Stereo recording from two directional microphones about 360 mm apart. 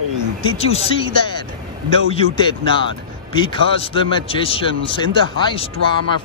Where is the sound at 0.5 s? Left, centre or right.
Centre.